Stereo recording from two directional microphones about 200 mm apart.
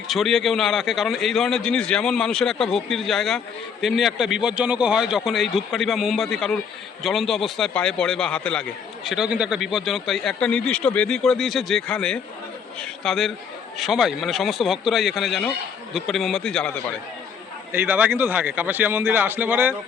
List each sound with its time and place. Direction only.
0.1 s a man's voice: centre (ahead or behind)
17.7 s a man's voice: 10° right (ahead or behind)